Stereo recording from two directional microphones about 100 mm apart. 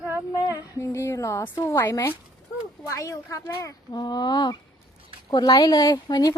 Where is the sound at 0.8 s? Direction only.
30° left (ahead or behind).